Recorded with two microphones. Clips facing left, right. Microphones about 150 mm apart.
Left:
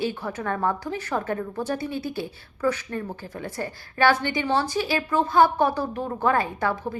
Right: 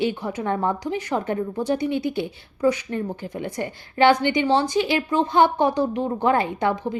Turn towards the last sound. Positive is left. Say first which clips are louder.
# right 3 dB
turn(degrees=-20)  # may be behind; listen again after turning